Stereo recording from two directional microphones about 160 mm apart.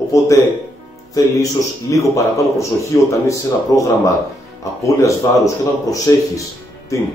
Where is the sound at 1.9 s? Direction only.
20° left (ahead or behind).